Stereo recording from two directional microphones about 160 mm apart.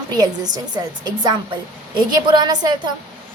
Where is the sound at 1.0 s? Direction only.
25° right (ahead or behind).